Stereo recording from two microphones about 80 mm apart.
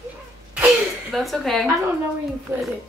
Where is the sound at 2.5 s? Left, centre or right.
Right.